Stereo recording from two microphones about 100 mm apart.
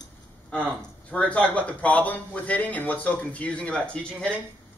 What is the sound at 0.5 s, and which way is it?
A man's voice, 15° left (ahead or behind).